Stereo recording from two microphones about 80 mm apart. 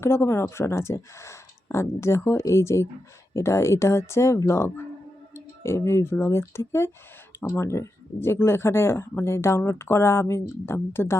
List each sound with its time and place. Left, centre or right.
0.0 s speech: left